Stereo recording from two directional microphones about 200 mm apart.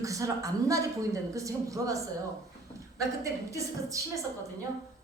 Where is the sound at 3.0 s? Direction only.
15° right (ahead or behind).